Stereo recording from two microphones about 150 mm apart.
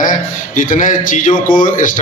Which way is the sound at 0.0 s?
65° left (ahead or behind).